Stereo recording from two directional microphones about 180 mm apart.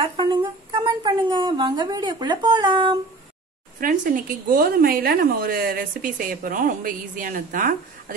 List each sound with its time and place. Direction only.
0.0 s speech: 30° right (ahead or behind)
3.8 s a woman's voice: 45° right (ahead or behind)